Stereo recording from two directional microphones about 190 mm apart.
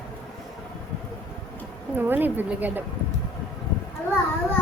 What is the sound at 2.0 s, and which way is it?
Speech, 10° right (ahead or behind).